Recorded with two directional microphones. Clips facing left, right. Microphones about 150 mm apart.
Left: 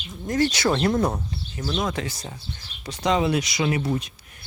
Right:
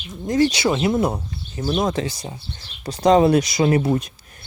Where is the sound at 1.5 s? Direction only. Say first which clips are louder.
Right 6 dB; 25° right (ahead or behind).